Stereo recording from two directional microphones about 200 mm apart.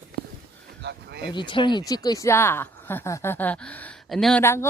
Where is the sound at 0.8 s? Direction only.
55° right (ahead or behind).